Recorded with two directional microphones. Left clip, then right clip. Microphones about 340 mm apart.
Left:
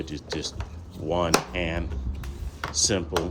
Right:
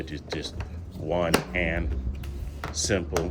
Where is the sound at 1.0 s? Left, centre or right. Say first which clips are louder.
Left 1 dB; left.